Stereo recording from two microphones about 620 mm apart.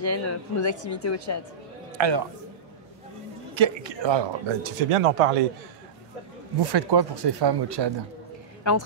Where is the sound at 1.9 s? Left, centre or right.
Right.